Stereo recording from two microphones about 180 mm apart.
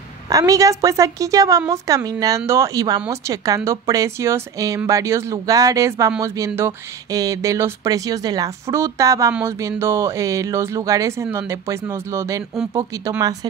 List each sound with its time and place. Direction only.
0.3 s a woman's voice: 20° right (ahead or behind)